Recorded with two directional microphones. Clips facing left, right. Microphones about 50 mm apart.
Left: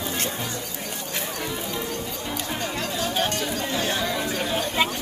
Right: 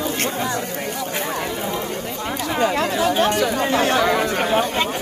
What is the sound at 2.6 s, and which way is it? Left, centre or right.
Speech, right.